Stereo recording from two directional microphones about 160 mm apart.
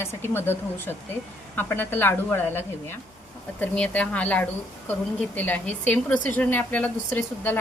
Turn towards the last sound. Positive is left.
turn(degrees=10)  # may be behind; listen again after turning